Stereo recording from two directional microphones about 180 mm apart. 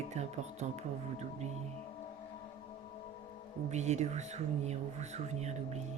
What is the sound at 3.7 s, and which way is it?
Speech, 40° right (ahead or behind).